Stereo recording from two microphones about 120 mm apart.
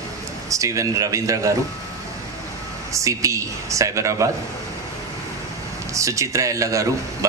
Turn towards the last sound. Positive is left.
turn(degrees=-25)  # may be behind; listen again after turning